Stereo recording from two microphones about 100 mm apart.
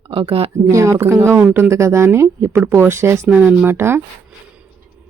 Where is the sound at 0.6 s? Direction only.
30° right (ahead or behind).